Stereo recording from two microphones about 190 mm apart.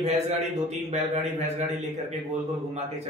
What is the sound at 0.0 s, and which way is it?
A man's voice, 35° right (ahead or behind).